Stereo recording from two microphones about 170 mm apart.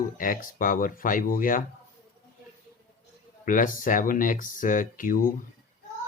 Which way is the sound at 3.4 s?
50° left (ahead or behind).